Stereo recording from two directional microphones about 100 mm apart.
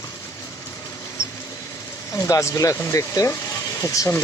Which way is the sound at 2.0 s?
35° left (ahead or behind).